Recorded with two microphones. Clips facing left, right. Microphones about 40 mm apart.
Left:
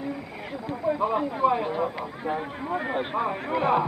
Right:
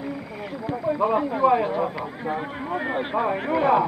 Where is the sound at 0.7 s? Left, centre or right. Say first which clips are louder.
Right 1 dB; centre.